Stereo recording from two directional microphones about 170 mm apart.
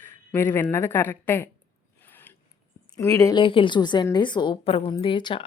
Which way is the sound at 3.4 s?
30° left (ahead or behind).